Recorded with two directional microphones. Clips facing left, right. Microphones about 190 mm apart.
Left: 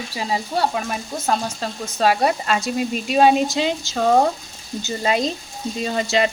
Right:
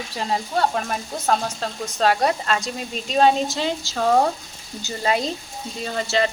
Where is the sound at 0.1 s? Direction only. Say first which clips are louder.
Even; 5° left (ahead or behind).